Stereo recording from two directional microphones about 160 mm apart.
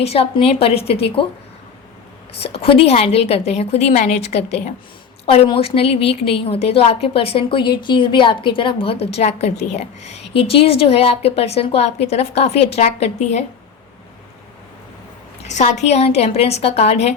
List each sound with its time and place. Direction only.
0.0 s a woman's voice: 40° left (ahead or behind)
2.4 s a woman's voice: 35° left (ahead or behind)
15.4 s a woman's voice: 45° left (ahead or behind)